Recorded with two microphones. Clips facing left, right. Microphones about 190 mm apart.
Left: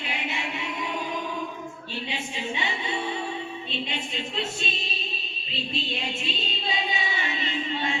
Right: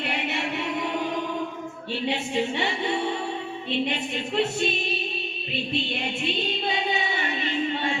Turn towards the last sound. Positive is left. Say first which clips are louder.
# right 3 dB
turn(degrees=-55)  # may be behind; listen again after turning